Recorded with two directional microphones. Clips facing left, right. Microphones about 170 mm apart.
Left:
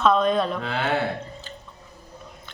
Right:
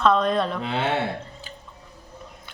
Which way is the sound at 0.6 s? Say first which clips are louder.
Even; 25° right (ahead or behind).